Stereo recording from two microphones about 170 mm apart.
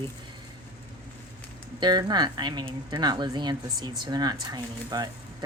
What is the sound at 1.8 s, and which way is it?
Speech, 25° right (ahead or behind).